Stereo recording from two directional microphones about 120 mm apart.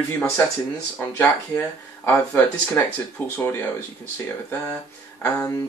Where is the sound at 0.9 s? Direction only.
15° left (ahead or behind).